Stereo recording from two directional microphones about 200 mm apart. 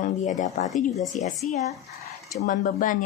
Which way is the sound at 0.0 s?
40° left (ahead or behind).